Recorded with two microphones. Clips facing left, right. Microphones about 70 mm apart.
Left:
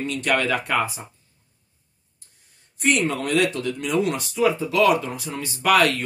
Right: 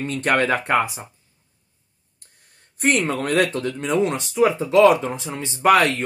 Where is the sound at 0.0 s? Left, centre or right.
Right.